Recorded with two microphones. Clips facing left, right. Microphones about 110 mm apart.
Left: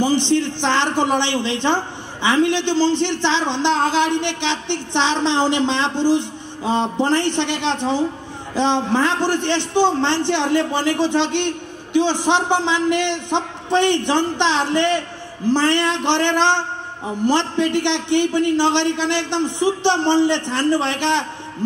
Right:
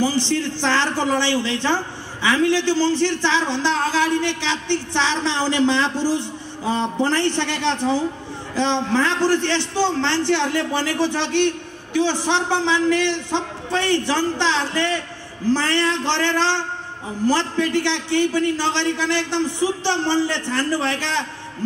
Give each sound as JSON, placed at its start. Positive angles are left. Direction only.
{"t": 0.0, "sound": "a man's voice", "side_deg": 20}